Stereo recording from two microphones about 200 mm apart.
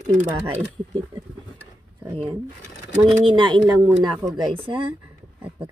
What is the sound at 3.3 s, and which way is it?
Speech, 25° right (ahead or behind).